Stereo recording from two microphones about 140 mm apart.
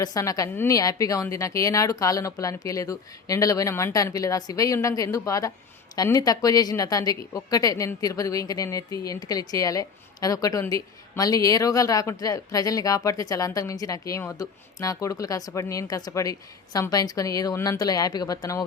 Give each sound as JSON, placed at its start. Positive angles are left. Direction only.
{"t": 0.0, "sound": "a woman's voice", "side_deg": 25}